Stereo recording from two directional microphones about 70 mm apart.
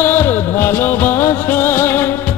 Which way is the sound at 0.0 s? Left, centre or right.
Left.